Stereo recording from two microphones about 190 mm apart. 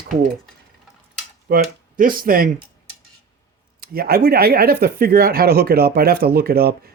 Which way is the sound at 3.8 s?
50° right (ahead or behind).